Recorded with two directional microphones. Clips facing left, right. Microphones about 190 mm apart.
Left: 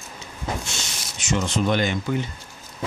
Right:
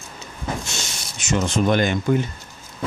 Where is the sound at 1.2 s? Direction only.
50° right (ahead or behind).